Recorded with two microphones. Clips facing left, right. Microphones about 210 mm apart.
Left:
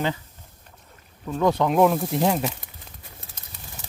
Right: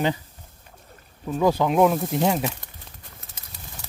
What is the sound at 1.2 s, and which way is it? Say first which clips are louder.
Speech: right 1 dB; 5° right (ahead or behind).